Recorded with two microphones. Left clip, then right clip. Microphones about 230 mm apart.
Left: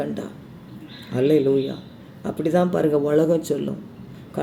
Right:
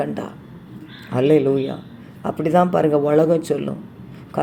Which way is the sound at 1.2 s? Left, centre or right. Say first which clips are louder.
Right 2 dB; centre.